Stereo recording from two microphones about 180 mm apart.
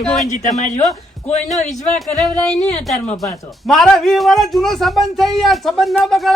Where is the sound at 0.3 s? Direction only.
45° left (ahead or behind).